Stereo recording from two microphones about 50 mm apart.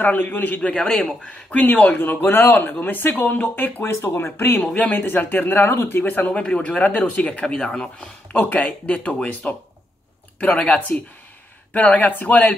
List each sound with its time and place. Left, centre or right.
0.0 s speech: left
0.7 s speech: centre
1.2 s speech: left
1.7 s speech: left
3.8 s speech: left
4.9 s speech: left
7.4 s speech: centre
9.3 s speech: left
10.4 s speech: left
12.0 s speech: left